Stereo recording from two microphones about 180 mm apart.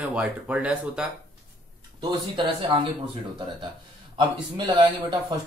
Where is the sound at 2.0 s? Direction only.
25° right (ahead or behind).